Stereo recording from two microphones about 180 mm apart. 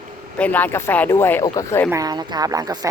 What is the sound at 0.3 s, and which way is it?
Speech, 10° left (ahead or behind).